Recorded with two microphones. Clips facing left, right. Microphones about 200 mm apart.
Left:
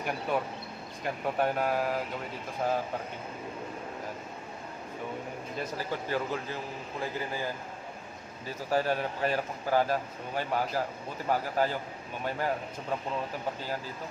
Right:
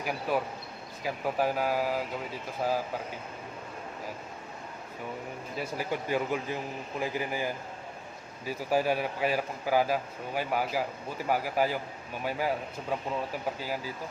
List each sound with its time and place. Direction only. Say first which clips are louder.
0.0 s speech: right 1 dB; 5° right (ahead or behind)
5.5 s speech: right 2 dB; 10° right (ahead or behind)